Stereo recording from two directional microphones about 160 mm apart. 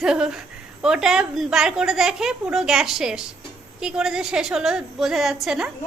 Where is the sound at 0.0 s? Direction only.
5° right (ahead or behind).